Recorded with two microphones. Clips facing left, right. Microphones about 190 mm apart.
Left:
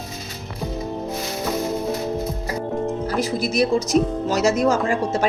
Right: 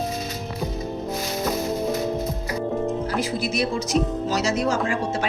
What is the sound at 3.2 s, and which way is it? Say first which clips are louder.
A woman's voice: left 7 dB; 40° left (ahead or behind).